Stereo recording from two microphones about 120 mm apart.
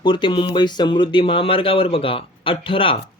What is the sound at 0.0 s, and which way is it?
Speech, 45° left (ahead or behind).